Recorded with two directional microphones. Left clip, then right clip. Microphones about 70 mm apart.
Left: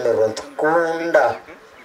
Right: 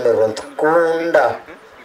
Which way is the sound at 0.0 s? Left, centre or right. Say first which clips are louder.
Right 3 dB; right.